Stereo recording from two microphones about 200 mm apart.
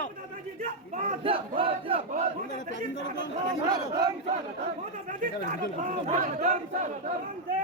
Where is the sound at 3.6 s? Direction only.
20° right (ahead or behind).